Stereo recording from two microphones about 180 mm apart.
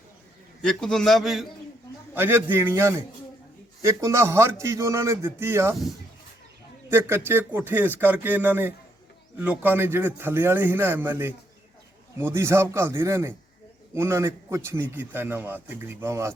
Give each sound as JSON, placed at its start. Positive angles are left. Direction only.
{"t": 0.6, "sound": "a man's voice", "side_deg": 5}
{"t": 2.1, "sound": "a man's voice", "side_deg": -10}
{"t": 6.9, "sound": "a man's voice", "side_deg": -10}